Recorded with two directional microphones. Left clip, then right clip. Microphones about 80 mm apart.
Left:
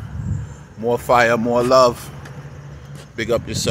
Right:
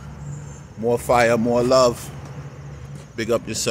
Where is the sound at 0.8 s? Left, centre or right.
Centre.